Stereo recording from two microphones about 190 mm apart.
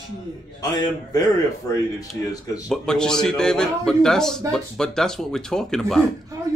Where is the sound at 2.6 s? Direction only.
5° left (ahead or behind).